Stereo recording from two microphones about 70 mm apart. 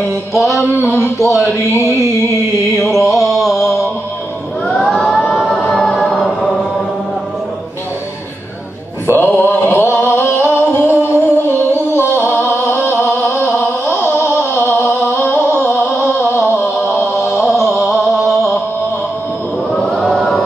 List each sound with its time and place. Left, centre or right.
0.4 s music: centre
0.9 s speech: left
1.8 s music: left
2.8 s mantra: centre
4.6 s choir: centre
9.1 s a sound: left
11.1 s music: left
16.3 s a sound: left
17.4 s music: centre
19.7 s chant: centre